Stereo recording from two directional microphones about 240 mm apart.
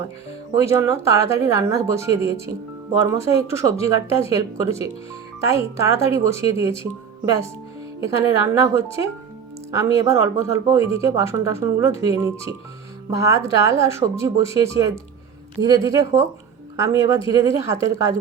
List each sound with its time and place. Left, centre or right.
0.6 s speech: centre
8.0 s speech: centre